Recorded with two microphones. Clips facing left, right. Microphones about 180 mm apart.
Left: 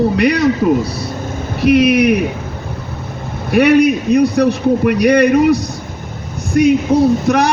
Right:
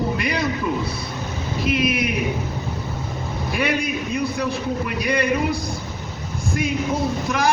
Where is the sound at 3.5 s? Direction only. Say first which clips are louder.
Left 14 dB; 70° left (ahead or behind).